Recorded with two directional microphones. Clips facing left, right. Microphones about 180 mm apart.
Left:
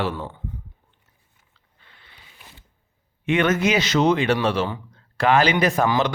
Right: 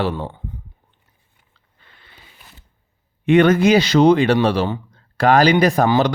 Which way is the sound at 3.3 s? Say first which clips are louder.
Right 7 dB; 35° right (ahead or behind).